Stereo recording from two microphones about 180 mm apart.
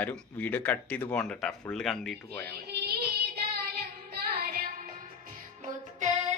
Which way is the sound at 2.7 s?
65° right (ahead or behind).